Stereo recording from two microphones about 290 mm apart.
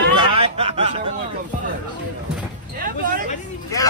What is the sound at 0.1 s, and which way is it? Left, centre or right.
Snicker, right.